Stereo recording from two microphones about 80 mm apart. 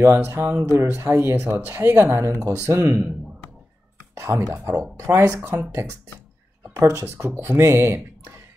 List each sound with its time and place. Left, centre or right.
0.0 s speech: right
2.3 s speech: right
4.1 s speech: right
6.7 s speech: right